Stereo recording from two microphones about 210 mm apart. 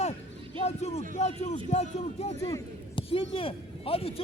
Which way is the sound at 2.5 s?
25° left (ahead or behind).